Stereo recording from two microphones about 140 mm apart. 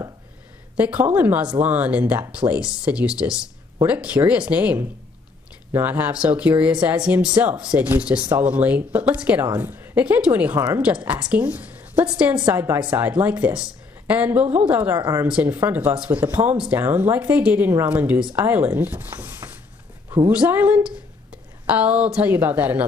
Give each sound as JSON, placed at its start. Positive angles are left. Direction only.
{"t": 0.7, "sound": "speech", "side_deg": -10}
{"t": 15.0, "sound": "speech", "side_deg": -25}
{"t": 15.2, "sound": "speech", "side_deg": -10}